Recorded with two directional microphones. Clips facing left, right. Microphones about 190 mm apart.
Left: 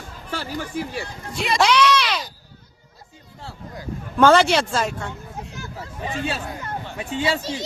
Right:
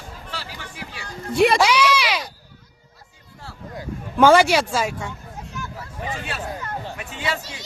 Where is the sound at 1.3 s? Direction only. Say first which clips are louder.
Right 9 dB; 60° right (ahead or behind).